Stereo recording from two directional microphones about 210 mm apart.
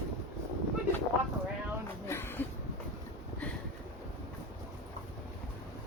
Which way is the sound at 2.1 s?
10° left (ahead or behind).